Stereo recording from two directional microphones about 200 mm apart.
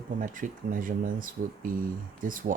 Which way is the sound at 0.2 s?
40° right (ahead or behind).